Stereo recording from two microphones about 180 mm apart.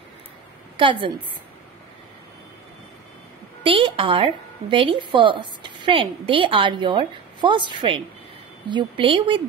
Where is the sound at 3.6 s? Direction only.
30° right (ahead or behind).